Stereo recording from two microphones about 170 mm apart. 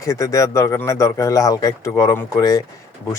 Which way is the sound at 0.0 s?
20° left (ahead or behind).